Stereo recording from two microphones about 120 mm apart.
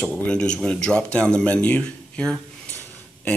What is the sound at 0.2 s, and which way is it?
Speech, 10° left (ahead or behind).